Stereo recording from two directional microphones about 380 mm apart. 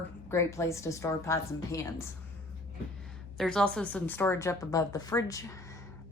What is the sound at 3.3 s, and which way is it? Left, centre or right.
Speech, centre.